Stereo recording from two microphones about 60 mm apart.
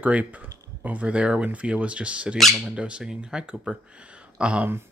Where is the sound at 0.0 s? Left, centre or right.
Right.